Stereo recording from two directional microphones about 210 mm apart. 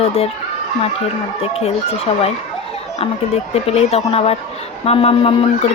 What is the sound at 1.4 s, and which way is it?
Speech, 30° left (ahead or behind).